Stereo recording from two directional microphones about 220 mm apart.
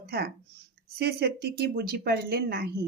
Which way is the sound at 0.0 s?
45° right (ahead or behind).